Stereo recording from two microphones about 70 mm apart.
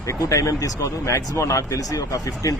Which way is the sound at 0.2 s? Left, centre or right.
Left.